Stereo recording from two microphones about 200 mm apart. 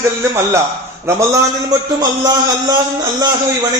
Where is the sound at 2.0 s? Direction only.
20° right (ahead or behind).